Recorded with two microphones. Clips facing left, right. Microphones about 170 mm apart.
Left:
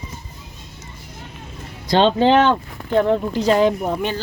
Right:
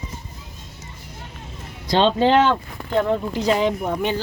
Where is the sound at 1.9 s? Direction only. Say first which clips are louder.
Left 2 dB; 55° left (ahead or behind).